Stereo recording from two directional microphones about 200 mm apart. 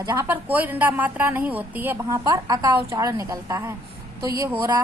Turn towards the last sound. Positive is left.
turn(degrees=-10)  # may be behind; listen again after turning